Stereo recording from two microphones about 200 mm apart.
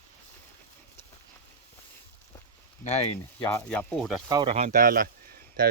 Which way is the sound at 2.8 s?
35° left (ahead or behind).